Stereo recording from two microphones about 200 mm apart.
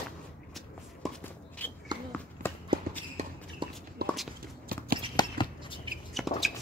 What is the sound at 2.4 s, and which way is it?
Run, 40° right (ahead or behind).